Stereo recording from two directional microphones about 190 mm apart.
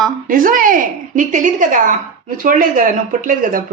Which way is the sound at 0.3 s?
45° right (ahead or behind).